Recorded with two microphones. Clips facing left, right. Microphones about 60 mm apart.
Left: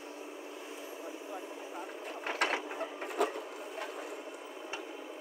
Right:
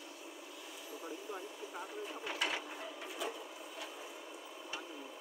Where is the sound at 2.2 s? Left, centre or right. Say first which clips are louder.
Left 7 dB; left.